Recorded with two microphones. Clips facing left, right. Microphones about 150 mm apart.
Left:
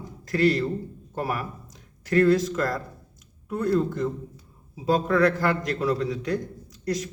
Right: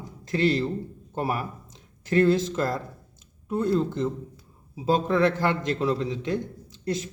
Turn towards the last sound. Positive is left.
turn(degrees=-25)  # may be behind; listen again after turning